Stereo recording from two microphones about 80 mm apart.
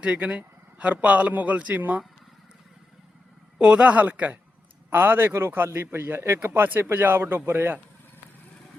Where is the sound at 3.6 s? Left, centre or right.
Centre.